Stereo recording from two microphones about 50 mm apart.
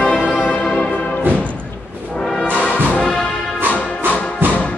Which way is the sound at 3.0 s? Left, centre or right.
Centre.